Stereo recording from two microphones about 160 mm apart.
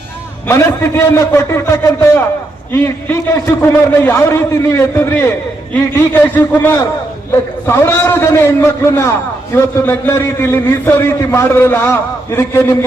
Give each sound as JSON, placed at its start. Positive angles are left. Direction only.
{"t": 0.4, "sound": "a man's voice", "side_deg": 15}
{"t": 6.3, "sound": "a man's voice", "side_deg": 10}